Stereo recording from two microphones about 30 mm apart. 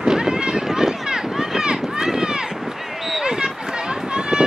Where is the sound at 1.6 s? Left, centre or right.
Right.